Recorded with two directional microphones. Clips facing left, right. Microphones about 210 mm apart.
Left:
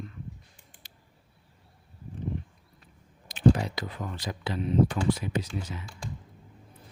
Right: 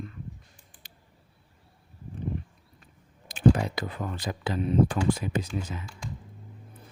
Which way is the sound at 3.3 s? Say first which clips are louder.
Right 1 dB; 55° right (ahead or behind).